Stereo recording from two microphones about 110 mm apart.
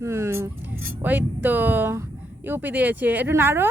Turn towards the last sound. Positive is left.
turn(degrees=-20)  # may be behind; listen again after turning